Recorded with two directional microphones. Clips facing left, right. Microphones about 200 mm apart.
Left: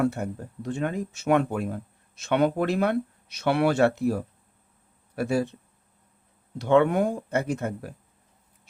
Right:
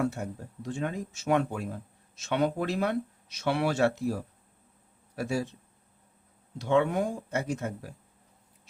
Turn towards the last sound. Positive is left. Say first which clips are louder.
# left 4 dB
turn(degrees=60)  # may be behind; listen again after turning